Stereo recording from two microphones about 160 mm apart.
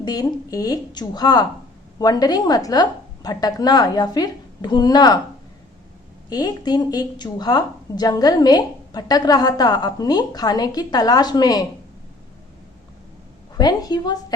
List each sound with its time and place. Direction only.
0.0 s a woman's voice: 25° left (ahead or behind)
6.3 s a woman's voice: 25° left (ahead or behind)
13.6 s a woman's voice: 25° left (ahead or behind)